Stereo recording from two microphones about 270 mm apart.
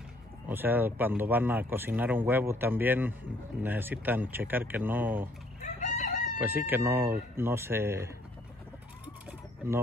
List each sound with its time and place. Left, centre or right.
0.5 s speech: centre
5.6 s chicken: left
6.4 s speech: centre